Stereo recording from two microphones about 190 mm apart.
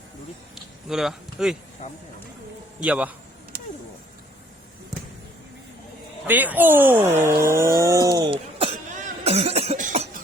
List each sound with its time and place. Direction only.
0.5 s a sound: centre (ahead or behind)
2.8 s a man's voice: 5° right (ahead or behind)
6.2 s speech: 10° right (ahead or behind); by 10.1 s 40° right (ahead or behind)